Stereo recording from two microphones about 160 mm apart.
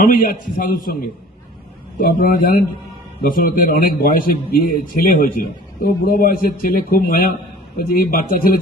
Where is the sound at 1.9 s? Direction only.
60° left (ahead or behind).